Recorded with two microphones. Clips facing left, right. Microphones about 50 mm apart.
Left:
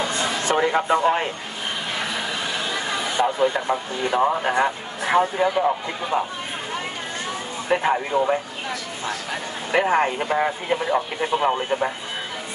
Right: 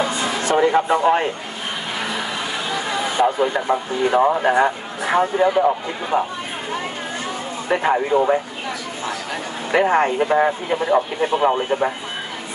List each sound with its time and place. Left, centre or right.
0.0 s a sound: centre
0.7 s speech: centre
3.2 s a man's voice: centre
7.7 s a man's voice: centre
9.7 s a man's voice: centre